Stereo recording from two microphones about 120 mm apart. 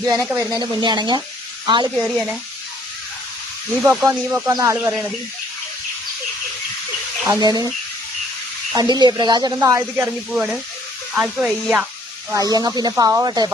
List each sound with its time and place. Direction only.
0.0 s a woman's voice: 30° right (ahead or behind)
3.8 s speech: 20° right (ahead or behind)
7.3 s speech: 30° right (ahead or behind)
8.7 s speech: 35° right (ahead or behind)
10.1 s speech: 10° right (ahead or behind)
12.3 s speech: 30° right (ahead or behind)